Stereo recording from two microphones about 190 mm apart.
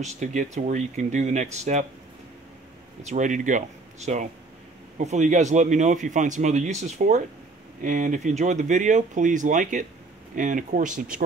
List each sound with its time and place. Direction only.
0.0 s a man's voice: 40° right (ahead or behind)
3.0 s a man's voice: 40° right (ahead or behind)